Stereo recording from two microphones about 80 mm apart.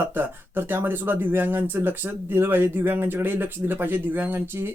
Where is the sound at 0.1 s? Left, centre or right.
Right.